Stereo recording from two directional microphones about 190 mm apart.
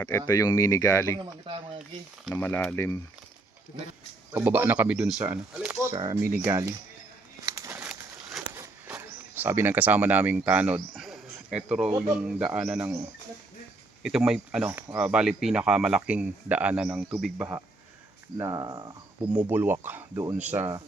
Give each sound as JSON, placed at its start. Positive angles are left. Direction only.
{"t": 0.0, "sound": "speech", "side_deg": 20}
{"t": 1.2, "sound": "speech", "side_deg": -25}
{"t": 2.3, "sound": "speech", "side_deg": 10}
{"t": 4.4, "sound": "speech", "side_deg": -10}
{"t": 5.9, "sound": "speech", "side_deg": -20}
{"t": 7.4, "sound": "crumpling", "side_deg": -15}
{"t": 8.5, "sound": "a sound", "side_deg": -15}
{"t": 12.4, "sound": "speech", "side_deg": -5}
{"t": 14.0, "sound": "speech", "side_deg": -5}
{"t": 18.3, "sound": "speech", "side_deg": -20}
{"t": 19.3, "sound": "speech", "side_deg": -10}